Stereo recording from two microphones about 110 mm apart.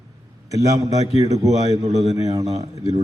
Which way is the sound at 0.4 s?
30° right (ahead or behind).